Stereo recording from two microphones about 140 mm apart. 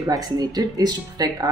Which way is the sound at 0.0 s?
25° right (ahead or behind).